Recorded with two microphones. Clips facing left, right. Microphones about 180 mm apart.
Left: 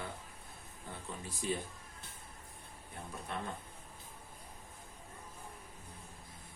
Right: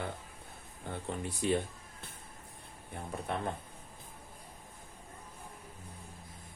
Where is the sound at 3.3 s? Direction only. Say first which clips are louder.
Right 5 dB; 60° right (ahead or behind).